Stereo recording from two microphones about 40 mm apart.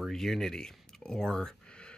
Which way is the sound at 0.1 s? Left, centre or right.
Centre.